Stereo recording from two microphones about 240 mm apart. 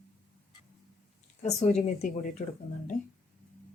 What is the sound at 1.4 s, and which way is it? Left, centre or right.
Speech, left.